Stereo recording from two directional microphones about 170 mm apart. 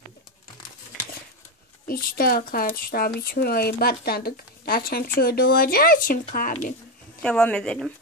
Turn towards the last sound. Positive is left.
turn(degrees=5)  # may be behind; listen again after turning